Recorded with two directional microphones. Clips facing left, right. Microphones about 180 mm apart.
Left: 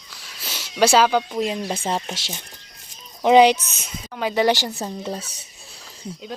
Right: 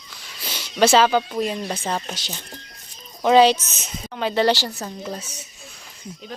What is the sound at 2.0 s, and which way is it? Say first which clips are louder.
A woman's voice: left 1 dB; 20° left (ahead or behind).